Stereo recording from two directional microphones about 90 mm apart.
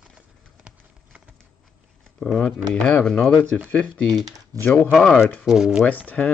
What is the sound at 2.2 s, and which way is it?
Speech, 5° left (ahead or behind).